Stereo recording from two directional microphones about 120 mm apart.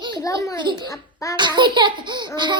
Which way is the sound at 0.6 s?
40° right (ahead or behind).